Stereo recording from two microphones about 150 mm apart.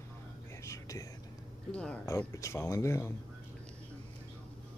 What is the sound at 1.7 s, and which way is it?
Speech, 10° left (ahead or behind).